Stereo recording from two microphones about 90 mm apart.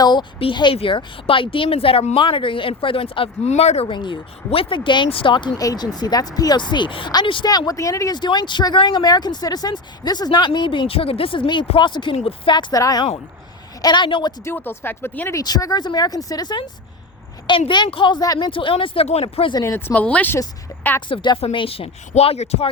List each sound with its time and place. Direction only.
0.0 s speech: 55° left (ahead or behind)
0.3 s speech: 75° left (ahead or behind)
3.8 s speech: 65° left (ahead or behind)
5.5 s speech: 45° left (ahead or behind); by 7.1 s 65° left (ahead or behind)
7.4 s speech: 45° left (ahead or behind)
8.1 s speech: 55° left (ahead or behind)
12.7 s speech: 45° left (ahead or behind)
13.8 s speech: 60° left (ahead or behind)
14.4 s speech: 25° left (ahead or behind)
15.4 s speech: 40° left (ahead or behind); by 18.2 s 60° left (ahead or behind)
18.2 s speech: 45° left (ahead or behind)
18.5 s speech: 80° left
19.6 s speech: 25° left (ahead or behind)
21.1 s speech: 65° left (ahead or behind); by 22.7 s 90° left